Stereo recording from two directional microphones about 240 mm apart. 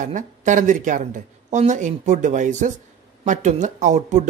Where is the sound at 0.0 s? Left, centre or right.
Right.